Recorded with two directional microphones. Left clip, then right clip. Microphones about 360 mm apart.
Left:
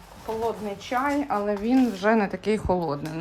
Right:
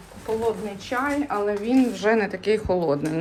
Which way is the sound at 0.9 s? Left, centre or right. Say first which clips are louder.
Even; centre.